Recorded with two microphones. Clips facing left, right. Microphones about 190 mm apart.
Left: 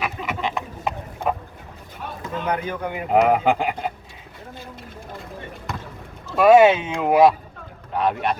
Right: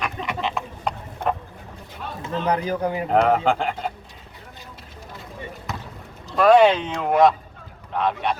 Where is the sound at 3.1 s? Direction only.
5° left (ahead or behind).